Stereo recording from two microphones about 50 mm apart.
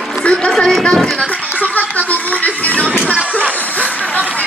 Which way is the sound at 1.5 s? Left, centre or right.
Left.